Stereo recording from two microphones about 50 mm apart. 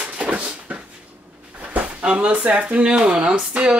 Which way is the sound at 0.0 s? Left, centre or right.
Right.